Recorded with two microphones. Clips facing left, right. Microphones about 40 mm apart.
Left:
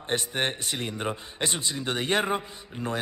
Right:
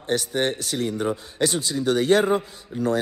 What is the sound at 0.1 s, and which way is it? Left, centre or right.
Speech, left.